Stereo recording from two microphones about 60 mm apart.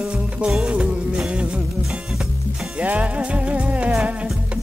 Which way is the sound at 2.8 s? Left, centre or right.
Right.